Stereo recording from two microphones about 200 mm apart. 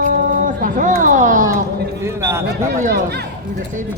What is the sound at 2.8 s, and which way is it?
Speech, 45° right (ahead or behind).